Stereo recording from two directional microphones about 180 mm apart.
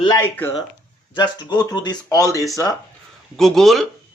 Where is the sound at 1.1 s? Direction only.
25° left (ahead or behind).